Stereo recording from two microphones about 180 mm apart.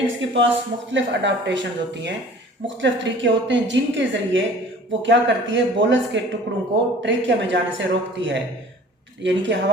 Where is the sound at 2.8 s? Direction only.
90° right.